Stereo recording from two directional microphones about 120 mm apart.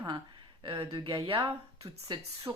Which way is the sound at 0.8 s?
30° right (ahead or behind).